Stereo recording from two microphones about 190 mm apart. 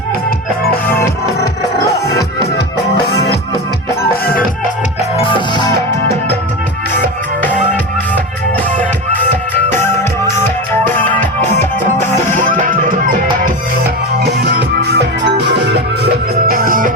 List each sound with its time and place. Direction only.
2.0 s music: 55° left (ahead or behind)
9.1 s music: 10° left (ahead or behind)
11.4 s music: 40° right (ahead or behind)
14.2 s music: 55° right (ahead or behind)